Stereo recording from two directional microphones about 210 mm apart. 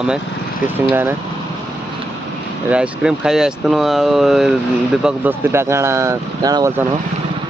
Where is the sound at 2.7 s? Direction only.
5° right (ahead or behind).